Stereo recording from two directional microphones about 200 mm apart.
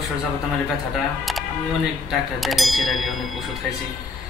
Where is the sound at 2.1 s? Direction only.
Centre (ahead or behind).